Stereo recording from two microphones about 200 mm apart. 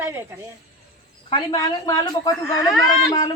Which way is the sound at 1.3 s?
20° left (ahead or behind).